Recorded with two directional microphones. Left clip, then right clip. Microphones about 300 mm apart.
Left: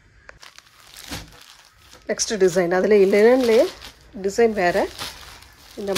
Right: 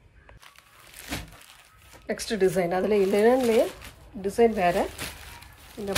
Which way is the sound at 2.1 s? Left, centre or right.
Left.